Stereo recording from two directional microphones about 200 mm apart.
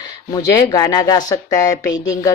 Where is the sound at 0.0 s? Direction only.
20° left (ahead or behind).